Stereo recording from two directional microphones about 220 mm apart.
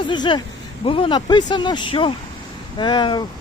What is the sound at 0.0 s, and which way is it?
Speech, 20° left (ahead or behind).